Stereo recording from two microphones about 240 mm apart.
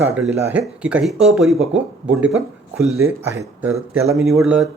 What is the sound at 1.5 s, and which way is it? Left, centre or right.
Speech, right.